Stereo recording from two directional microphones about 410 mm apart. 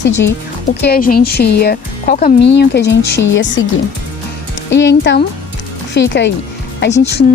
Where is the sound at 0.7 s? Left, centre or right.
Left.